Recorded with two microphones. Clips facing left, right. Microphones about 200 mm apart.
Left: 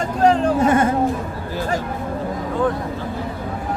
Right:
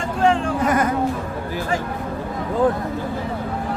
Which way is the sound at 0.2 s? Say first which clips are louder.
Left 3 dB; 40° left (ahead or behind).